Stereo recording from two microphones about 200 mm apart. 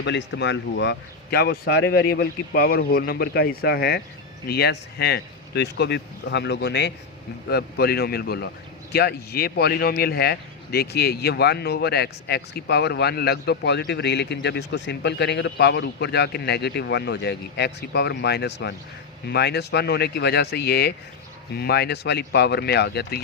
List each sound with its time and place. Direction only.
0.0 s speech: 60° left (ahead or behind)